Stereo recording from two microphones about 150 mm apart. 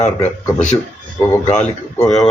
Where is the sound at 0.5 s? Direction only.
50° left (ahead or behind).